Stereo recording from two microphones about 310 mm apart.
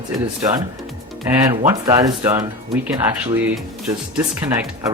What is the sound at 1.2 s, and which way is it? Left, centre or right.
Speech, centre.